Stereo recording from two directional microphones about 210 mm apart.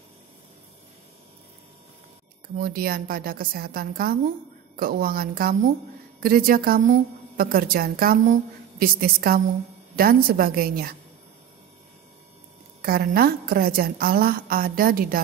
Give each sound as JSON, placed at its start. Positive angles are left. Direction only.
{"t": 2.5, "sound": "a woman's voice", "side_deg": -45}
{"t": 12.8, "sound": "a woman's voice", "side_deg": -45}